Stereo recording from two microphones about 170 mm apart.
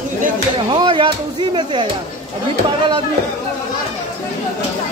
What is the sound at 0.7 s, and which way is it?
Speech, 30° right (ahead or behind).